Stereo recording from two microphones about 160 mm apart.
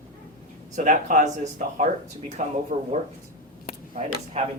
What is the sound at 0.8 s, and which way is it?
Speech, 55° right (ahead or behind).